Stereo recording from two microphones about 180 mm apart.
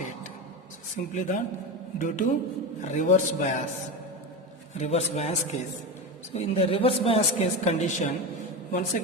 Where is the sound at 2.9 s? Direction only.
45° left (ahead or behind).